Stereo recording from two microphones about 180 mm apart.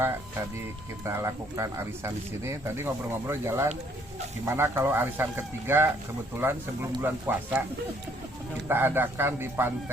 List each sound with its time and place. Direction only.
1.0 s speech: 15° right (ahead or behind)
8.6 s speech: 10° right (ahead or behind)